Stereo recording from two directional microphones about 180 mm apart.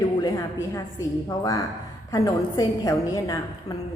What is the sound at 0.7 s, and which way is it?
A woman's voice, 20° left (ahead or behind).